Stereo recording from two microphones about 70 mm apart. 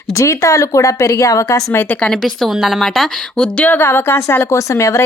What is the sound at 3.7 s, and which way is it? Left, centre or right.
Speech, left.